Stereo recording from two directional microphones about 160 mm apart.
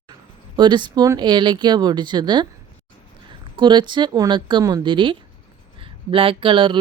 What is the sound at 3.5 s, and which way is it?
Speech, 30° right (ahead or behind).